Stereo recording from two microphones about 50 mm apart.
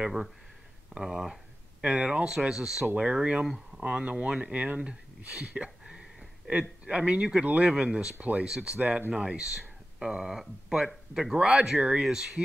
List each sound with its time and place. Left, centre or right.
0.0 s speech: centre
1.8 s speech: right
5.9 s a sound: centre
6.9 s speech: right
8.2 s speech: right